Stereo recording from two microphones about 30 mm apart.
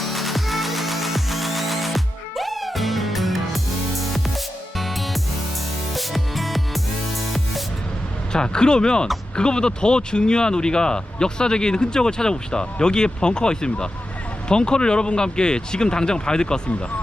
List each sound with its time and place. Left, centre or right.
0.0 s music: centre
8.3 s speech: left